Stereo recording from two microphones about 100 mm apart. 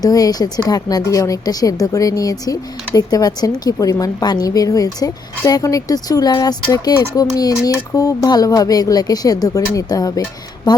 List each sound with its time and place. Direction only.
0.0 s speech: 40° left (ahead or behind)